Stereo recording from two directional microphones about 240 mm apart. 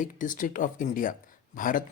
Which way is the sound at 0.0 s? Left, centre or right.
Left.